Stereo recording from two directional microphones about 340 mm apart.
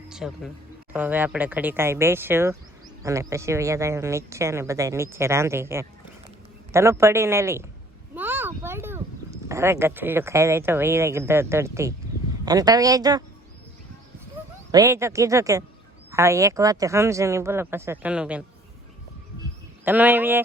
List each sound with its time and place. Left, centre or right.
0.1 s speech: centre
14.7 s speech: centre
19.8 s a man's voice: centre